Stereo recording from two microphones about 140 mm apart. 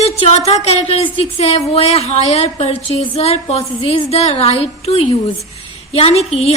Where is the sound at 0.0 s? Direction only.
50° left (ahead or behind).